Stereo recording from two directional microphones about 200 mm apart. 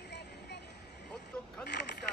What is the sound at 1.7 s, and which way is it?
Vehicle, 60° left (ahead or behind).